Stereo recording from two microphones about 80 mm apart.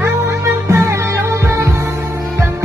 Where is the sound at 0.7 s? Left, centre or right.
Right.